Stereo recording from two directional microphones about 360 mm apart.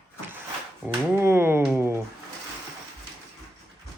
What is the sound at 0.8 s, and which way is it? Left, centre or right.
Speech, centre.